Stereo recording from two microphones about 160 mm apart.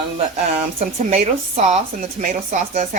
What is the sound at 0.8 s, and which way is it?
Speech, 45° right (ahead or behind).